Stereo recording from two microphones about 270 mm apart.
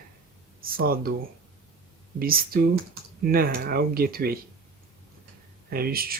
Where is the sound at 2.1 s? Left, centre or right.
Right.